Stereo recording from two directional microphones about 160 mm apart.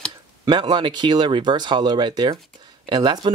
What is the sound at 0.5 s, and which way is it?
Speech, 25° right (ahead or behind).